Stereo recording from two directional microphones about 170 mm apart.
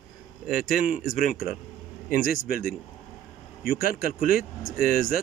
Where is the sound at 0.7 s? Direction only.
50° left (ahead or behind).